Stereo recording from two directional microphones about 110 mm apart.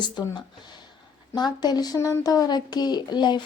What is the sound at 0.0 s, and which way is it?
Speech, 40° left (ahead or behind).